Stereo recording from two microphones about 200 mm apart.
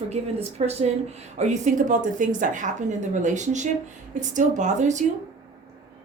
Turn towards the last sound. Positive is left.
turn(degrees=-35)  # may be behind; listen again after turning